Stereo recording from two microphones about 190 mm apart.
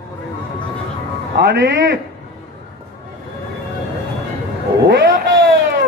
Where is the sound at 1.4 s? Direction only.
70° right (ahead or behind).